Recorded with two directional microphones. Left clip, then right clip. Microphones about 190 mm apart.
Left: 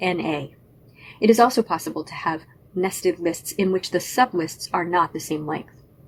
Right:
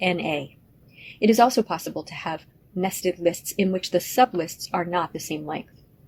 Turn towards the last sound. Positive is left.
turn(degrees=-45)  # may be behind; listen again after turning